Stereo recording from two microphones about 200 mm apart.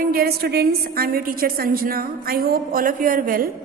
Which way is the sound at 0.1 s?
50° right (ahead or behind).